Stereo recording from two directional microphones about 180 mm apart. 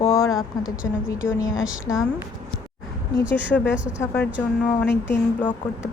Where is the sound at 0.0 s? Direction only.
15° left (ahead or behind).